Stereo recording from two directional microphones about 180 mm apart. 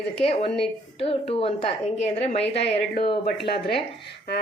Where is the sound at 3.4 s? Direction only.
65° left (ahead or behind).